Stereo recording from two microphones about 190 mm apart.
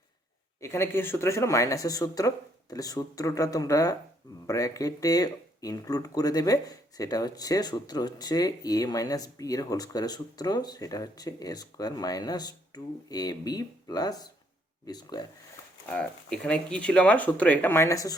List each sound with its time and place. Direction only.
0.6 s speech: 15° left (ahead or behind)
15.9 s speech: 5° left (ahead or behind)